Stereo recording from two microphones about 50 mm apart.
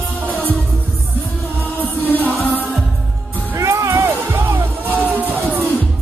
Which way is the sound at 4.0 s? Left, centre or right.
Right.